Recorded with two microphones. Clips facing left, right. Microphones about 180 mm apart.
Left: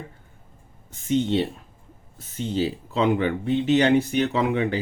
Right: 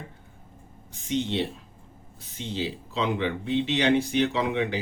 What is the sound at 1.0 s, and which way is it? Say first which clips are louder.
Speech: left 5 dB; 50° left (ahead or behind).